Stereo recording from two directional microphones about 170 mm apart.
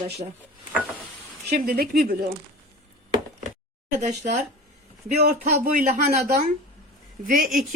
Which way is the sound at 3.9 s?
45° right (ahead or behind).